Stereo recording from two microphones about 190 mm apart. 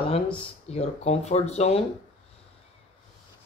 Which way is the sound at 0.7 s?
30° left (ahead or behind).